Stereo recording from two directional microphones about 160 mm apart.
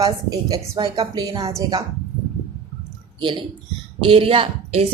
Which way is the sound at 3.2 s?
30° right (ahead or behind).